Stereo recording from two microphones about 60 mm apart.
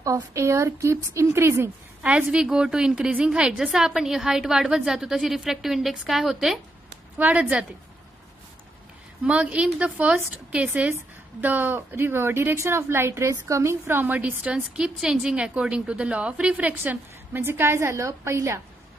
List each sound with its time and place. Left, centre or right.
0.0 s speech: right
2.3 s a woman's voice: centre
7.2 s a woman's voice: right
9.2 s a woman's voice: centre; by 13.9 s right
13.9 s speech: right
14.4 s a woman's voice: centre; by 17.7 s right
17.7 s a woman's voice: right